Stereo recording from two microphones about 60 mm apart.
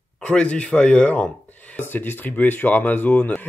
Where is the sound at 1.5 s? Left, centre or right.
Left.